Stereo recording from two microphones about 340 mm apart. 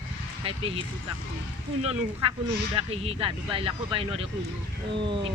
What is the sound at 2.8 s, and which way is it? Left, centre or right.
Speech, centre.